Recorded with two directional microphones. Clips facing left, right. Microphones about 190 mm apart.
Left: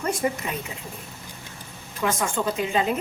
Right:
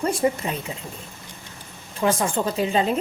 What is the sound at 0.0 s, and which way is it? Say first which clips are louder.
Speech: right 4 dB; 30° right (ahead or behind).